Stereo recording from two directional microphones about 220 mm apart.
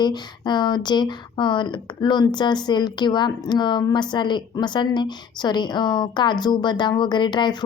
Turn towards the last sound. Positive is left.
turn(degrees=20)  # may be behind; listen again after turning